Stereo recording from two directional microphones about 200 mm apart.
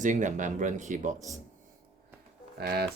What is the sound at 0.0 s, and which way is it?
Speech, 40° right (ahead or behind).